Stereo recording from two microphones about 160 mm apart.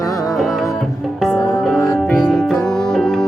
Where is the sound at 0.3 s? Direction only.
Centre (ahead or behind).